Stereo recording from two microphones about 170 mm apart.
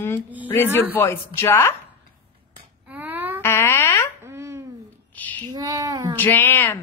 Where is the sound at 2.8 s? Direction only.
10° right (ahead or behind).